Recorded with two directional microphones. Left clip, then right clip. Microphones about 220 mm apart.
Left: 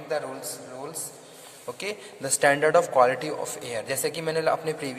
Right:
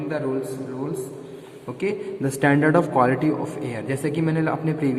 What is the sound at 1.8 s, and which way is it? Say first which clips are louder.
Speech: right 8 dB; 35° left (ahead or behind).